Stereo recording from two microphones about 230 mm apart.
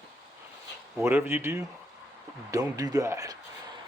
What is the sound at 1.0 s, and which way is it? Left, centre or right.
Speech, centre.